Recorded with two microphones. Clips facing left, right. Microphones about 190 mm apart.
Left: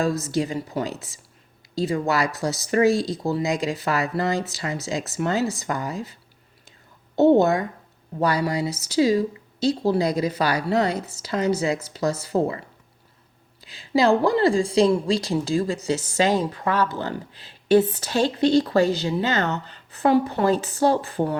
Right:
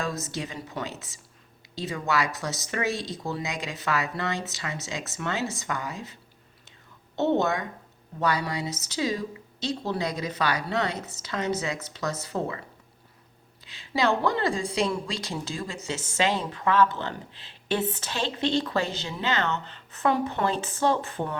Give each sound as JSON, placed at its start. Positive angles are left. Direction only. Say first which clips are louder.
{"t": 0.0, "sound": "speech", "louder": "left 9 dB", "side_deg": 35}
{"t": 7.2, "sound": "speech", "louder": "left 8 dB", "side_deg": 35}
{"t": 13.7, "sound": "a sound", "louder": "left 6 dB", "side_deg": 35}
{"t": 14.2, "sound": "speech", "louder": "left 7 dB", "side_deg": 30}